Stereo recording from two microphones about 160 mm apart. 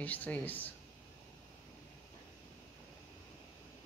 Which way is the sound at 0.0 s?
10° left (ahead or behind).